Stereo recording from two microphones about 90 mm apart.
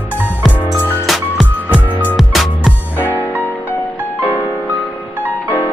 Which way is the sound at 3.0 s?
20° left (ahead or behind).